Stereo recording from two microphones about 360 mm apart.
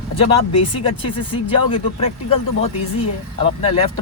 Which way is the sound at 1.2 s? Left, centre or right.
Centre.